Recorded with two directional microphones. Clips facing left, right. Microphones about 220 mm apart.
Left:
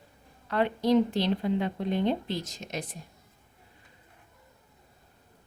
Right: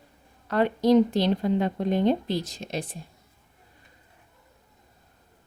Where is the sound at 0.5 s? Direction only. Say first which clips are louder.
Right 4 dB; 40° right (ahead or behind).